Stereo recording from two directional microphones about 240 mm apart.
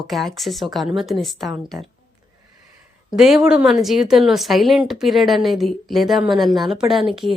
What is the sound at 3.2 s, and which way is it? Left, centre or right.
Speech, centre.